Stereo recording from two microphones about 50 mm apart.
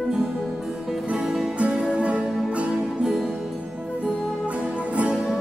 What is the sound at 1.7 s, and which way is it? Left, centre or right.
Music, right.